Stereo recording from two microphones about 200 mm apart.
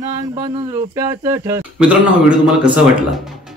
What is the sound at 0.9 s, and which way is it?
Speech, 15° right (ahead or behind).